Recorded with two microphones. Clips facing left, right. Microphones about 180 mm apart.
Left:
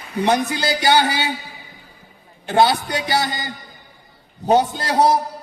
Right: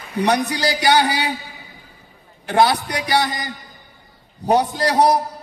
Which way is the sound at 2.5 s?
25° left (ahead or behind).